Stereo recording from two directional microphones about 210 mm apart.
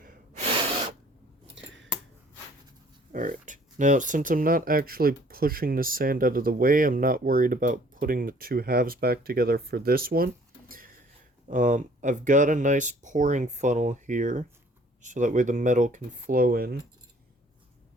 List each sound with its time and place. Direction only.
0.0 s gasp: 40° right (ahead or behind)
1.5 s scissors: 60° right (ahead or behind)
3.1 s speech: 40° right (ahead or behind)
10.7 s a sound: 40° right (ahead or behind)
11.4 s speech: 40° right (ahead or behind)